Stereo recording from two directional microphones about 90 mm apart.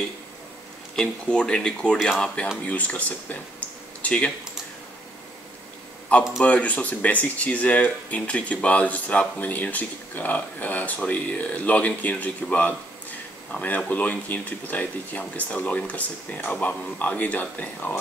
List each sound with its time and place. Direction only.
0.9 s speech: 10° left (ahead or behind)
4.0 s typing: 15° left (ahead or behind)
6.1 s speech: 15° left (ahead or behind)